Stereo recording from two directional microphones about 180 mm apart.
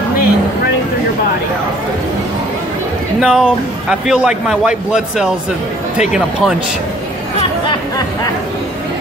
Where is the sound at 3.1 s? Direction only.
5° right (ahead or behind).